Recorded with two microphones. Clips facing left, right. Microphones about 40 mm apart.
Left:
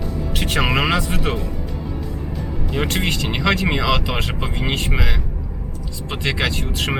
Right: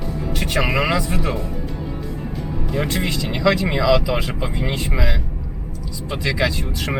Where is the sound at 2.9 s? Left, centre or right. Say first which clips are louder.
Left 1 dB; left.